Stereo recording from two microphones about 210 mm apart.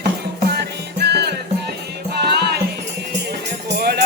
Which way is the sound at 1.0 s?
50° right (ahead or behind).